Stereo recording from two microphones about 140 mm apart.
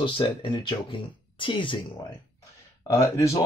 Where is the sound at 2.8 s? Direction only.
20° left (ahead or behind).